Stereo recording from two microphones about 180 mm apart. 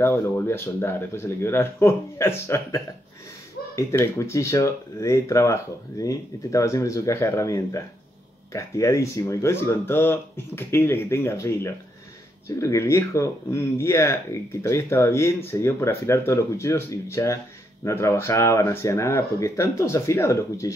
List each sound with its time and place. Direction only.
0.0 s speech: 15° left (ahead or behind)